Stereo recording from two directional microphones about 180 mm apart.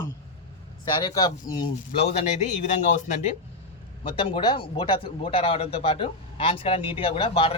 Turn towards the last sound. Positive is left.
turn(degrees=30)  # may be behind; listen again after turning